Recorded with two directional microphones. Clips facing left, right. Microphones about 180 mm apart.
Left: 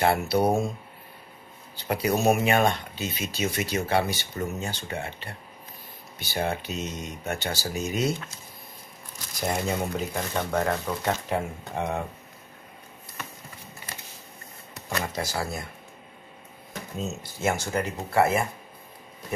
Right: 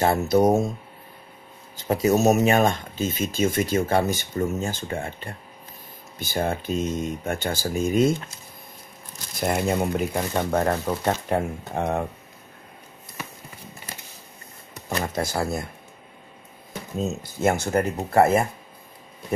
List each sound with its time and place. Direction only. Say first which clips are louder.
0.0 s speech: right 4 dB; 40° right (ahead or behind)
1.9 s speech: right 4 dB; 40° right (ahead or behind)
9.3 s speech: right 4 dB; 55° right (ahead or behind)
10.1 s speech: right 4 dB; 40° right (ahead or behind)
15.1 s speech: right 5 dB; 50° right (ahead or behind)
17.4 s speech: right 5 dB; 55° right (ahead or behind)